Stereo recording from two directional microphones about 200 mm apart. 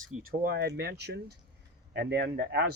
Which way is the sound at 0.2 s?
50° right (ahead or behind).